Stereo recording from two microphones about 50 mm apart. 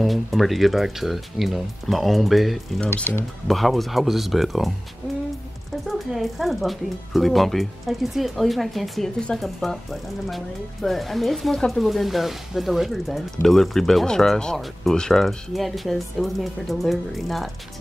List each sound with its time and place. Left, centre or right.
0.0 s speech: centre
5.9 s speech: centre
11.8 s speech: centre